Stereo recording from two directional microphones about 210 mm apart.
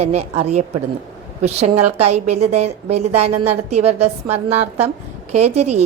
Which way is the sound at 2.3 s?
30° right (ahead or behind).